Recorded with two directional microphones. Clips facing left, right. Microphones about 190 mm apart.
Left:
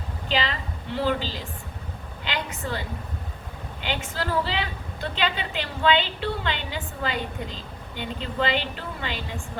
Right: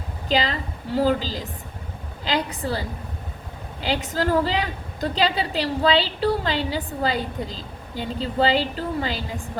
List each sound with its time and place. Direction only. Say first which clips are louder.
0.3 s a woman's voice: right 4 dB; 40° right (ahead or behind)